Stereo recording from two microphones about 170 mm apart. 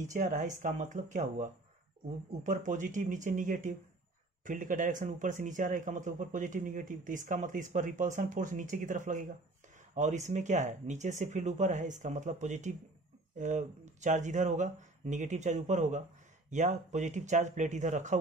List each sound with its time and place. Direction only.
0.0 s speech: 45° right (ahead or behind)